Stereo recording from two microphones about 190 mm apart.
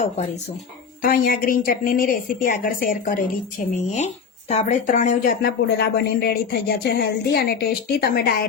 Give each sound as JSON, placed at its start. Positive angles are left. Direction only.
{"t": 1.0, "sound": "a woman's voice", "side_deg": 50}
{"t": 3.9, "sound": "speech", "side_deg": 35}